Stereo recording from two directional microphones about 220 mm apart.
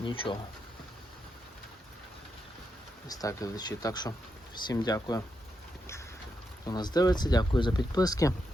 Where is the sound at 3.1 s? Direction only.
15° left (ahead or behind).